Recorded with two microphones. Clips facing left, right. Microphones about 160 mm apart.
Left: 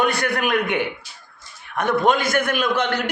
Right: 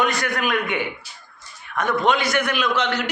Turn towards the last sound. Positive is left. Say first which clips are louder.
# left 1 dB
turn(degrees=55)  # may be behind; listen again after turning